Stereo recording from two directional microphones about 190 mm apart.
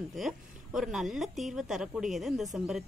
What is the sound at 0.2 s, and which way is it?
Speech, centre (ahead or behind).